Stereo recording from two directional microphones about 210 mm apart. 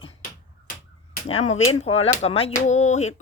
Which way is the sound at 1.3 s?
30° left (ahead or behind).